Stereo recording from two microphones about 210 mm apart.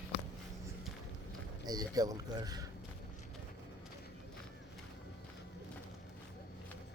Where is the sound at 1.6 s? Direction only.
20° right (ahead or behind).